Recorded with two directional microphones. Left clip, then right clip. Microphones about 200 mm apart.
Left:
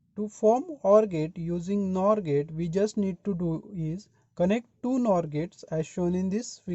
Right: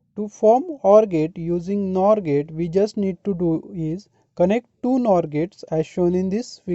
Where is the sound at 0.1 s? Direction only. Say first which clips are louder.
Right 7 dB; 25° right (ahead or behind).